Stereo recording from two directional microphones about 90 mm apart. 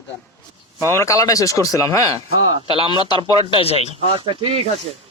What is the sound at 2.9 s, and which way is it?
Speech, 60° left (ahead or behind).